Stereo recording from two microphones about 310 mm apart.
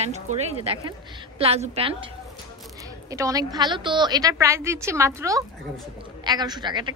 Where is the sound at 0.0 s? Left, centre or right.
Right.